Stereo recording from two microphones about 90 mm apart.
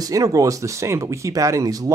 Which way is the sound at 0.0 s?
40° right (ahead or behind).